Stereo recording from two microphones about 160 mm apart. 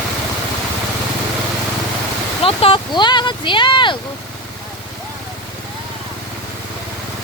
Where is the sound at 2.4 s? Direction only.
35° left (ahead or behind).